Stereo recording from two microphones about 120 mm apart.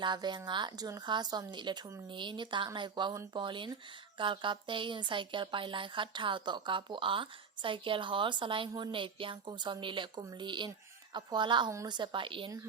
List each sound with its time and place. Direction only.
0.0 s speech: 40° right (ahead or behind)